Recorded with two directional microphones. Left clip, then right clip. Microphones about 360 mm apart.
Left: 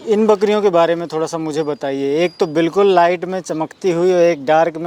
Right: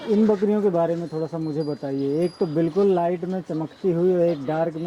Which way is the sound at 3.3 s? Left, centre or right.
Centre.